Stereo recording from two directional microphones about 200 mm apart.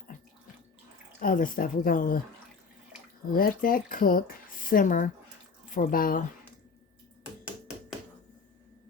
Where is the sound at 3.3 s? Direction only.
45° left (ahead or behind).